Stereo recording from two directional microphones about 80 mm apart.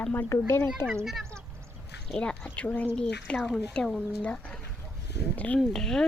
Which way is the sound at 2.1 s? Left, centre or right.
Centre.